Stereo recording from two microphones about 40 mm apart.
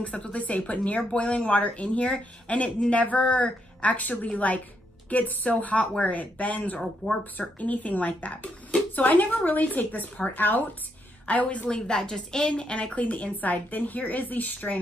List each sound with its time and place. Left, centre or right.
0.0 s a woman's voice: left
7.0 s a woman's voice: left
11.4 s a woman's voice: left
11.7 s a woman's voice: centre; by 14.8 s left